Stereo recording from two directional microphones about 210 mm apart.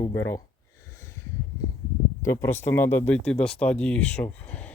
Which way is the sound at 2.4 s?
10° left (ahead or behind).